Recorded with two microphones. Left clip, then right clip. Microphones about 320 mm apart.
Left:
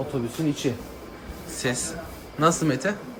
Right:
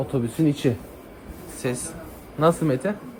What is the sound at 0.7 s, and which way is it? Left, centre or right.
Speech, right.